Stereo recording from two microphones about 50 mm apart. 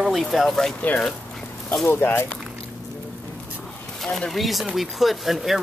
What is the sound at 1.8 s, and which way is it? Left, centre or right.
Speech, left.